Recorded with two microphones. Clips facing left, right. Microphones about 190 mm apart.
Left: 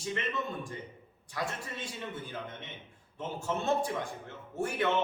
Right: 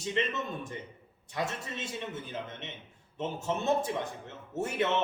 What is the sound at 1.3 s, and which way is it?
Speech, 25° right (ahead or behind).